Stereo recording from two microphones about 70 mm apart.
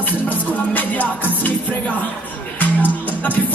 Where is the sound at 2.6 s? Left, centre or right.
Left.